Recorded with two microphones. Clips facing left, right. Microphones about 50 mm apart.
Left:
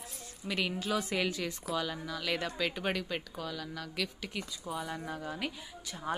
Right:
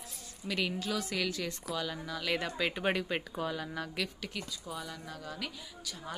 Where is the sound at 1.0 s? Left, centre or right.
Centre.